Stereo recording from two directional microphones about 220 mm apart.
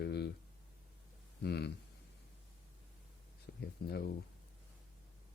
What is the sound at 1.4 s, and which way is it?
Speech, 50° left (ahead or behind).